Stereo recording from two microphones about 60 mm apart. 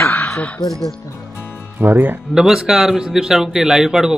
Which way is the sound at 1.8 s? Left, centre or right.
Right.